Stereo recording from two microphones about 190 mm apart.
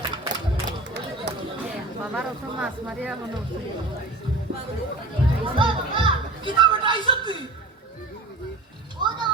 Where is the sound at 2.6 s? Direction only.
5° right (ahead or behind).